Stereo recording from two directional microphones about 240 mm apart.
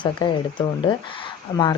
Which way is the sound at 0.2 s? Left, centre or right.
Centre.